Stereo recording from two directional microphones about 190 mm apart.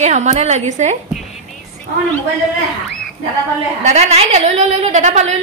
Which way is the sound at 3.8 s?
35° right (ahead or behind).